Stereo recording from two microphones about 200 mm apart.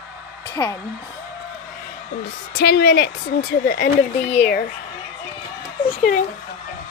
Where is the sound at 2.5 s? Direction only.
50° left (ahead or behind).